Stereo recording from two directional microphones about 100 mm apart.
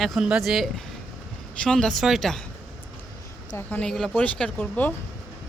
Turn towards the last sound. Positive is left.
turn(degrees=15)  # may be behind; listen again after turning